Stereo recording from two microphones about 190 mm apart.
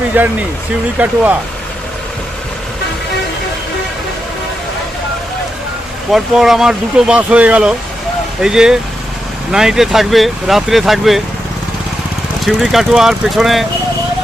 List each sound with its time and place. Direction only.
0.1 s speech: 10° right (ahead or behind)
6.1 s speech: centre (ahead or behind)
12.5 s speech: centre (ahead or behind)